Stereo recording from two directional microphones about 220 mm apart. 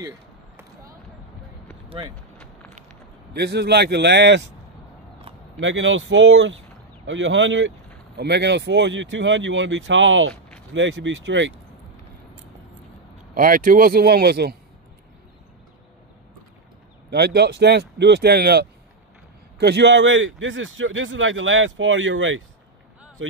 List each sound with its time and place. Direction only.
3.3 s speech: 50° right (ahead or behind)
5.6 s speech: 60° right (ahead or behind)
13.3 s speech: 40° right (ahead or behind)
17.1 s speech: 45° right (ahead or behind)